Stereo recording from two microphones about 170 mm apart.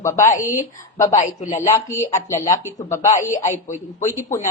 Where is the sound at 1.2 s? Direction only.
45° left (ahead or behind).